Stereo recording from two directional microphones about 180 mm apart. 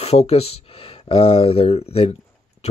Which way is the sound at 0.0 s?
35° left (ahead or behind).